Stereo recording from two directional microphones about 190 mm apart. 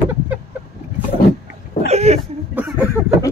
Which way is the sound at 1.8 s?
35° right (ahead or behind).